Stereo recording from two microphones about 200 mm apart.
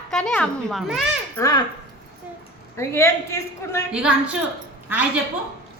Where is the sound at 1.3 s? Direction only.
15° left (ahead or behind).